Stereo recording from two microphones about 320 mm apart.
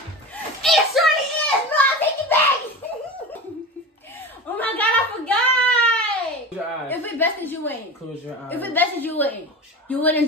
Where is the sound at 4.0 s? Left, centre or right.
Centre.